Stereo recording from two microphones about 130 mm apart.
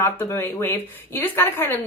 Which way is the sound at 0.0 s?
15° left (ahead or behind).